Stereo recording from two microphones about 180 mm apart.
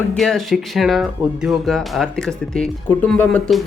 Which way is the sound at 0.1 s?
Centre (ahead or behind).